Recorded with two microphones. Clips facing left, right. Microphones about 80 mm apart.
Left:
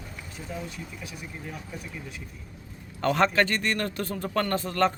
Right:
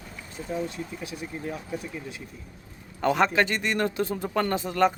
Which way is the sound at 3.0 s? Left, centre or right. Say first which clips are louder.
Right 1 dB; centre.